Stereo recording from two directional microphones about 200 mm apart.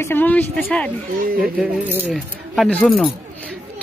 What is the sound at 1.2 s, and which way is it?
Speech, 45° right (ahead or behind).